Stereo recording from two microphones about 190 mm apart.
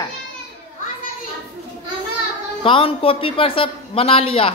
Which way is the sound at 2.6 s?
30° left (ahead or behind).